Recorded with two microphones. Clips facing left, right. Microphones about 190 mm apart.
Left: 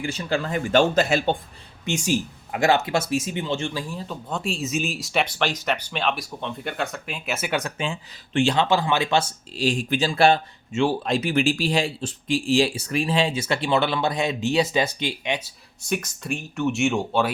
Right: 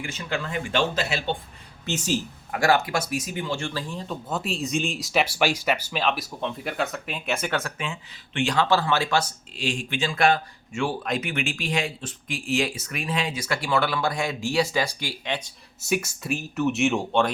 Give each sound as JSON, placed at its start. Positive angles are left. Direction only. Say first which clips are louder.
{"t": 0.0, "sound": "speech", "louder": "left 5 dB", "side_deg": 35}
{"t": 1.8, "sound": "speech", "louder": "left 3 dB", "side_deg": 15}
{"t": 7.6, "sound": "speech", "louder": "left 4 dB", "side_deg": 30}
{"t": 8.5, "sound": "speech", "louder": "left 1 dB", "side_deg": 20}
{"t": 9.6, "sound": "speech", "louder": "left 5 dB", "side_deg": 35}
{"t": 15.9, "sound": "speech", "louder": "right 1 dB", "side_deg": -5}